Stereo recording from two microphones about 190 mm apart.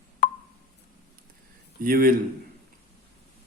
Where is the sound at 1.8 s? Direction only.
50° right (ahead or behind).